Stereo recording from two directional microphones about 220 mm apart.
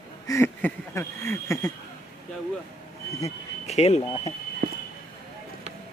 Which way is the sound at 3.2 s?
30° left (ahead or behind).